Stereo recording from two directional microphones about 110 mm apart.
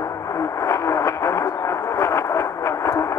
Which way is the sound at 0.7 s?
30° left (ahead or behind).